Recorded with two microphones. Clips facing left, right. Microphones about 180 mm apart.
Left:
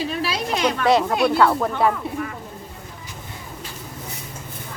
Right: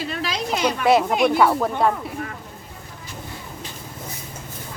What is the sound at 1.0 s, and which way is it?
Speech, 15° right (ahead or behind).